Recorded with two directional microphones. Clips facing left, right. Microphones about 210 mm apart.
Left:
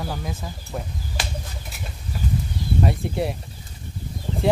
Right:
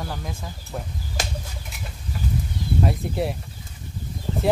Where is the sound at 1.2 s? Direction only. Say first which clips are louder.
Right 2 dB; 45° right (ahead or behind).